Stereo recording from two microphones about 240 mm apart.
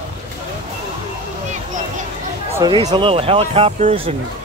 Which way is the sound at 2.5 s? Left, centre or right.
Centre.